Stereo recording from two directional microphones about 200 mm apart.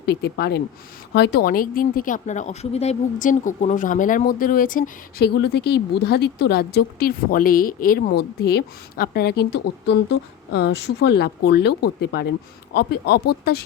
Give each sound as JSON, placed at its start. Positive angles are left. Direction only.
{"t": 0.0, "sound": "speech", "side_deg": 55}